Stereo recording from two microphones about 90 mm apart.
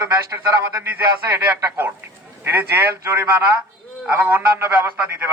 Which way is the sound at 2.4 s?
25° right (ahead or behind).